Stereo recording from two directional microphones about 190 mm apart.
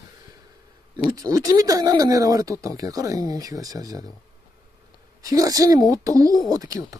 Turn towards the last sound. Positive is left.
turn(degrees=-20)  # may be behind; listen again after turning